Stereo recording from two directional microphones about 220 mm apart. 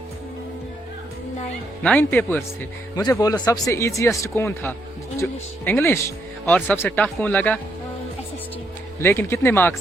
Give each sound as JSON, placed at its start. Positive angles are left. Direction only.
{"t": 1.8, "sound": "speech", "side_deg": 5}
{"t": 9.0, "sound": "speech", "side_deg": 10}